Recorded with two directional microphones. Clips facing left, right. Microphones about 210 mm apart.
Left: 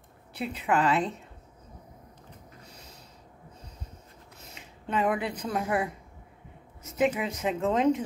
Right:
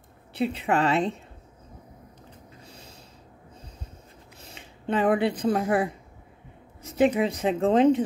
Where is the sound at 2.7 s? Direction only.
30° right (ahead or behind).